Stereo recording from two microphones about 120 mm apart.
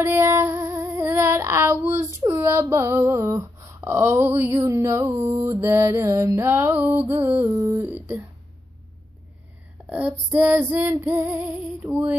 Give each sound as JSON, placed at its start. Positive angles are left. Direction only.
{"t": 0.0, "sound": "female singing", "side_deg": -20}
{"t": 2.1, "sound": "a sound", "side_deg": -20}
{"t": 9.8, "sound": "female singing", "side_deg": -10}